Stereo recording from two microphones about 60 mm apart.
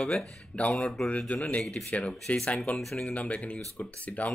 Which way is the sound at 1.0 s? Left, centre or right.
Centre.